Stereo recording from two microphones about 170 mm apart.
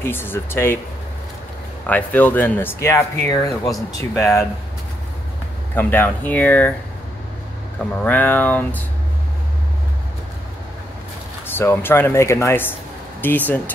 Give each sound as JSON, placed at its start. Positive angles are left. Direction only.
{"t": 0.0, "sound": "speech", "side_deg": 15}
{"t": 1.9, "sound": "speech", "side_deg": 10}
{"t": 5.8, "sound": "speech", "side_deg": 10}
{"t": 8.0, "sound": "speech", "side_deg": 10}
{"t": 11.4, "sound": "speech", "side_deg": 10}